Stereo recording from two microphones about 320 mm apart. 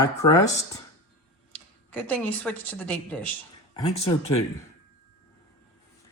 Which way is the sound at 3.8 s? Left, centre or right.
Centre.